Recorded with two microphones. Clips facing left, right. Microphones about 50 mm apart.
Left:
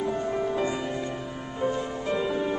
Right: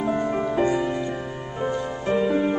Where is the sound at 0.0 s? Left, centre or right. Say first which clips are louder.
Right 4 dB; right.